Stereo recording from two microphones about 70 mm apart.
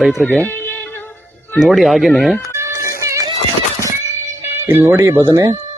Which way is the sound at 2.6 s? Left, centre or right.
Right.